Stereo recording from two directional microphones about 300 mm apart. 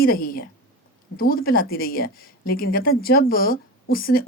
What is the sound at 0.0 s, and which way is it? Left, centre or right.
A woman's voice, left.